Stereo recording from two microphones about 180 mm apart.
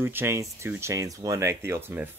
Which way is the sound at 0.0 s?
10° right (ahead or behind).